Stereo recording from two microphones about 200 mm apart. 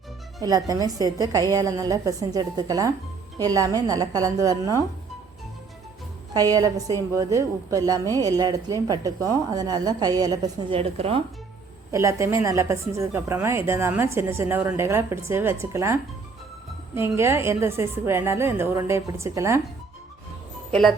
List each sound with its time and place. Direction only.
0.3 s speech: 15° right (ahead or behind)
6.3 s a woman's voice: 20° right (ahead or behind)
11.9 s speech: 15° right (ahead or behind)